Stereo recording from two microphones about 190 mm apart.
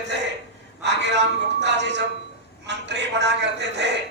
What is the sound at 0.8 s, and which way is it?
A man's voice, 65° right (ahead or behind).